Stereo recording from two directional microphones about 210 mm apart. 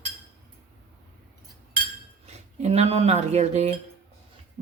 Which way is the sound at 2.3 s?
30° right (ahead or behind).